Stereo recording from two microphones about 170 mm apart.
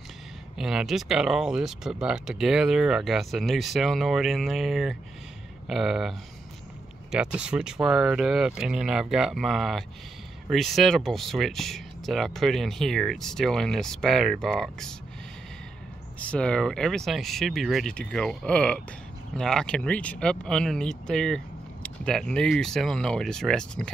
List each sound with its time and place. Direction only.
0.6 s speech: 5° right (ahead or behind)
16.2 s speech: 5° left (ahead or behind)